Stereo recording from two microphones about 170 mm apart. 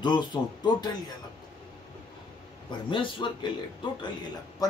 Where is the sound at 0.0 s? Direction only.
25° left (ahead or behind).